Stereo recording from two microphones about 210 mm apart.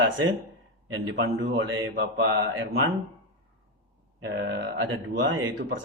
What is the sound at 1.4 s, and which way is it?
Mantra, 45° right (ahead or behind).